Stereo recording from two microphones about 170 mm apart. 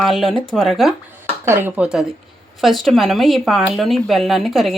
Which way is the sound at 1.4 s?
15° right (ahead or behind).